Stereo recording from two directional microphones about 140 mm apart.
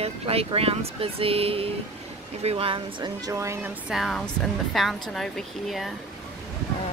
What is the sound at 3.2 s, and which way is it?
Speech, 20° right (ahead or behind).